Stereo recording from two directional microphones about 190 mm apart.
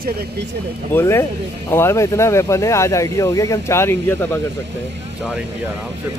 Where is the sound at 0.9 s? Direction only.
15° left (ahead or behind).